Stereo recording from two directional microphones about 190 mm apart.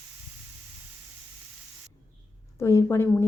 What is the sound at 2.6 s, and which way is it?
Speech, 15° left (ahead or behind).